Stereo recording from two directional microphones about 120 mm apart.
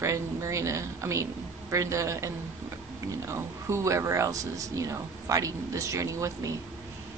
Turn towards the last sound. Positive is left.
turn(degrees=-25)  # may be behind; listen again after turning